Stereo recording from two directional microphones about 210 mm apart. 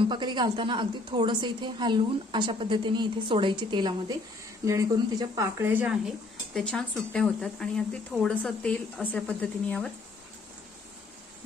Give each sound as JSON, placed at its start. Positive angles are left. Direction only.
{"t": 0.1, "sound": "a woman's voice", "side_deg": -20}